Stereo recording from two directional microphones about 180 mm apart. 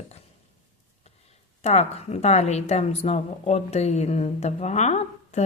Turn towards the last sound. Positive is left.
turn(degrees=40)  # may be behind; listen again after turning